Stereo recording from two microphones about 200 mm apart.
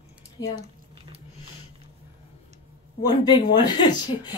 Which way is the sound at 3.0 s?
20° left (ahead or behind).